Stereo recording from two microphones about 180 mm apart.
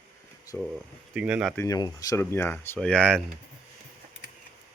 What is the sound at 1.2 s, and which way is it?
Speech, 5° right (ahead or behind).